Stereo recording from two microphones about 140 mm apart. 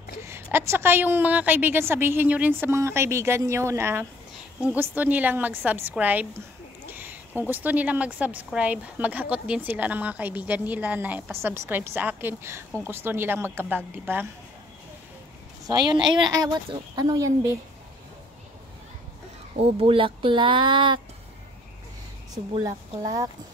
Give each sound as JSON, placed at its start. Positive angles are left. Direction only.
{"t": 0.2, "sound": "a woman's voice", "side_deg": -20}
{"t": 15.6, "sound": "a woman's voice", "side_deg": -30}
{"t": 19.6, "sound": "speech", "side_deg": -40}
{"t": 22.4, "sound": "a woman's voice", "side_deg": -45}